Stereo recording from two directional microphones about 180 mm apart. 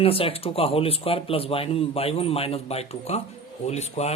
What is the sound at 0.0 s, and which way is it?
Speech, 30° left (ahead or behind).